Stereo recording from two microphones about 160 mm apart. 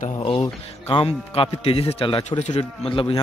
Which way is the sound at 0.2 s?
35° left (ahead or behind).